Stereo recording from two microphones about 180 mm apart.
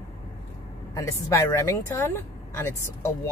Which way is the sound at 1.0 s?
15° left (ahead or behind).